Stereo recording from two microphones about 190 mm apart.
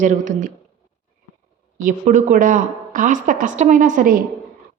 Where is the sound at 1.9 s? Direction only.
45° right (ahead or behind).